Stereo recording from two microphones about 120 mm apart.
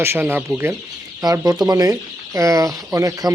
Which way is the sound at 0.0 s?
20° right (ahead or behind).